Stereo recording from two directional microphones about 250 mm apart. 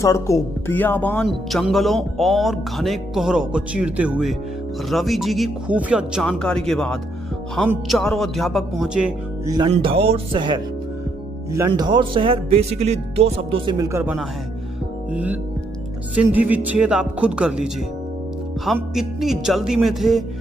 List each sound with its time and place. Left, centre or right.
0.0 s speech: centre
9.6 s speech: right
16.2 s speech: centre